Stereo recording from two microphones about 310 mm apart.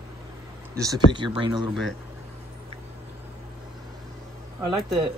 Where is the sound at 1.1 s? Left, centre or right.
Centre.